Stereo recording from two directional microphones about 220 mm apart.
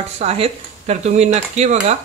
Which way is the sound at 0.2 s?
30° right (ahead or behind).